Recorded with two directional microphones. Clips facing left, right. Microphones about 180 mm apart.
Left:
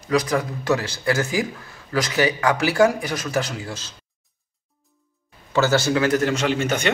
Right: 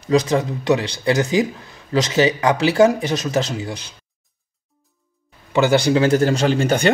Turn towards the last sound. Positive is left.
turn(degrees=-35)  # may be behind; listen again after turning